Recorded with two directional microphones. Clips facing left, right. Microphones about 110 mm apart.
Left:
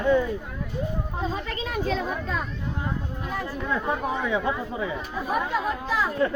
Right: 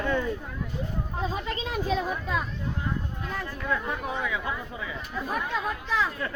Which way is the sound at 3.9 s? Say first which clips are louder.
Left 5 dB; 25° left (ahead or behind).